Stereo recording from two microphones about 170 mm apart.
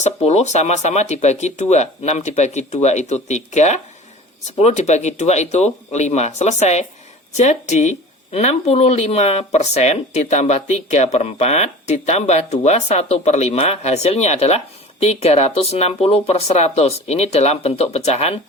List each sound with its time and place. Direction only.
0.0 s speech: 40° left (ahead or behind)